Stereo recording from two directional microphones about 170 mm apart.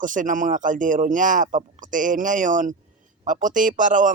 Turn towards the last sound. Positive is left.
turn(degrees=-50)  # may be behind; listen again after turning